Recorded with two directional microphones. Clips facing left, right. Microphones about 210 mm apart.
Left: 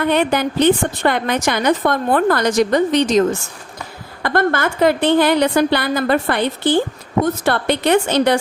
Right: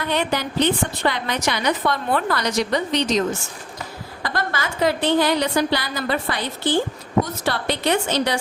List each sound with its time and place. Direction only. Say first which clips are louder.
0.0 s a woman's voice: left 7 dB; 55° left (ahead or behind)